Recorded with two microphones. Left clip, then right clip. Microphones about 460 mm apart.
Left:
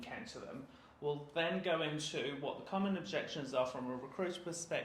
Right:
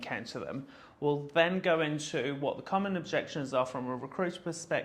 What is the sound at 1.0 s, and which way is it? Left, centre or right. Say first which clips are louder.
Speech: right 9 dB; right.